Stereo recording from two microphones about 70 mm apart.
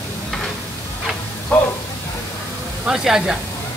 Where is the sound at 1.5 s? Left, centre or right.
Left.